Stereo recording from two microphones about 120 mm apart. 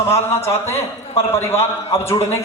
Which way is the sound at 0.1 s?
20° left (ahead or behind).